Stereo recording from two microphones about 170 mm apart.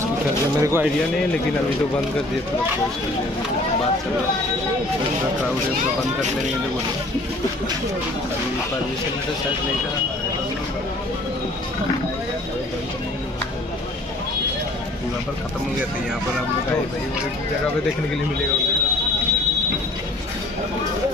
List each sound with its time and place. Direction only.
0.6 s speech: 15° right (ahead or behind)